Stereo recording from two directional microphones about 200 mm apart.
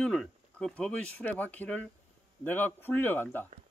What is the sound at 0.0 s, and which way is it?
Speech, 5° left (ahead or behind).